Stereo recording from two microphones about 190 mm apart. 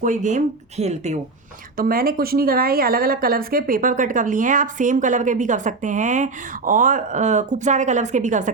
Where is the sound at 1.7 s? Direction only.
50° right (ahead or behind).